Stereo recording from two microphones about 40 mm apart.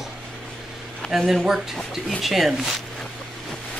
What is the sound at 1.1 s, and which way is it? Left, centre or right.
A man's voice, centre.